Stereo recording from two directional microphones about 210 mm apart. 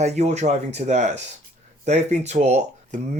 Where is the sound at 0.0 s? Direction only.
30° right (ahead or behind).